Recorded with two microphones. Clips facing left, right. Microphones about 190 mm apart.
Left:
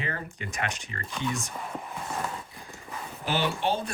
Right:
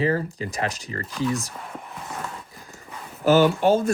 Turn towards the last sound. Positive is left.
turn(degrees=-45)  # may be behind; listen again after turning